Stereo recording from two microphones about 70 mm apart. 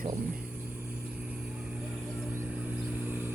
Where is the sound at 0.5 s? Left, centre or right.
Centre.